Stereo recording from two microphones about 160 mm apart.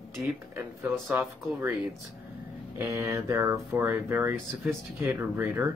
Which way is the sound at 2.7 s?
20° right (ahead or behind).